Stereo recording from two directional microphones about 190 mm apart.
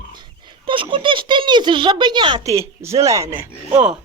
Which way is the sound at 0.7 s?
25° right (ahead or behind).